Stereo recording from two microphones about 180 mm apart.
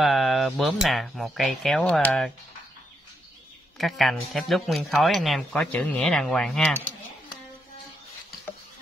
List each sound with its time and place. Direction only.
0.0 s speech: centre (ahead or behind)
3.7 s speech: centre (ahead or behind)